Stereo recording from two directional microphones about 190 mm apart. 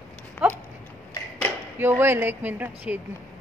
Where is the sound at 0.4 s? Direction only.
5° right (ahead or behind).